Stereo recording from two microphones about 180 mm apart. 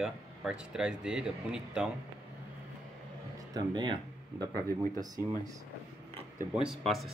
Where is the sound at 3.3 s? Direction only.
25° right (ahead or behind).